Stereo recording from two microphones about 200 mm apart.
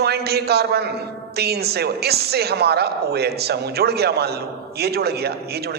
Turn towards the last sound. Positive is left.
turn(degrees=-55)  # may be behind; listen again after turning